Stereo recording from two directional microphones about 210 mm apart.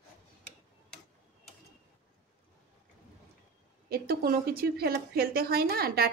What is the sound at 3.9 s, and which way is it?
A woman's voice, 45° right (ahead or behind).